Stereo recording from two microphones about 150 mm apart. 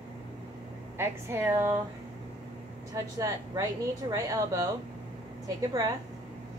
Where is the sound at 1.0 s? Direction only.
15° right (ahead or behind).